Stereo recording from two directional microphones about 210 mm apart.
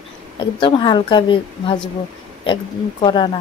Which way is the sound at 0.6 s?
25° left (ahead or behind).